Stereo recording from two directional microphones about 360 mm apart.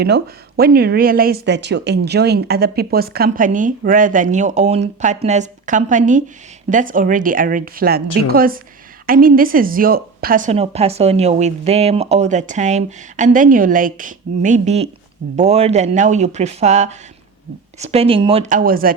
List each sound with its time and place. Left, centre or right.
0.0 s a woman's voice: right